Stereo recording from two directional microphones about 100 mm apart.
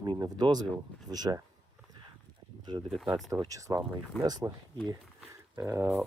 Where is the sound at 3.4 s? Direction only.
35° right (ahead or behind).